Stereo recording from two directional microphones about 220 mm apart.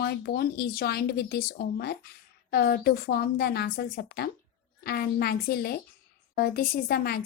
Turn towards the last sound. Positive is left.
turn(degrees=45)  # may be behind; listen again after turning